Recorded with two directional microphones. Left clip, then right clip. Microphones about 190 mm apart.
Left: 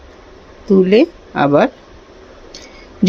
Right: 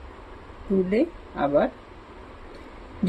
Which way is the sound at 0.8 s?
40° left (ahead or behind).